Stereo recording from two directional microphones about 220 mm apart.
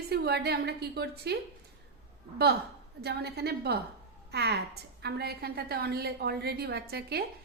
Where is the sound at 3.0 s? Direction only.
50° right (ahead or behind).